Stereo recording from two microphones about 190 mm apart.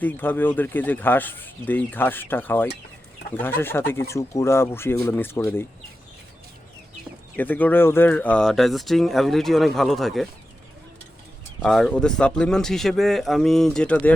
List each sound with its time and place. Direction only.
0.0 s speech: 10° left (ahead or behind)
7.3 s speech: 10° left (ahead or behind)
11.6 s speech: 5° left (ahead or behind)